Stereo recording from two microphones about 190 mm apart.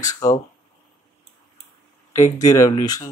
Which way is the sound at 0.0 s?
20° left (ahead or behind).